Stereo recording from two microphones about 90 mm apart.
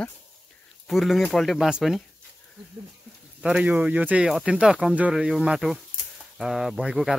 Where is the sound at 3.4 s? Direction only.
10° right (ahead or behind).